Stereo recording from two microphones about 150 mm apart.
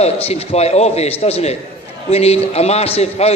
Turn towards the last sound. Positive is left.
turn(degrees=45)  # may be behind; listen again after turning